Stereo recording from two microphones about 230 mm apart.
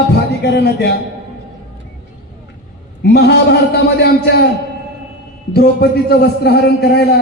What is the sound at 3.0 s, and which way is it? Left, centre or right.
A man's voice, left.